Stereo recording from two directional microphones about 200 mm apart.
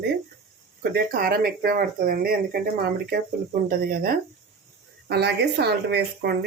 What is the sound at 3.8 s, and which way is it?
Speech, 45° right (ahead or behind).